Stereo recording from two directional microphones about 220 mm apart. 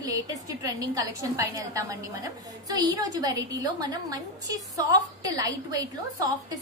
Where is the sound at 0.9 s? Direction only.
15° right (ahead or behind).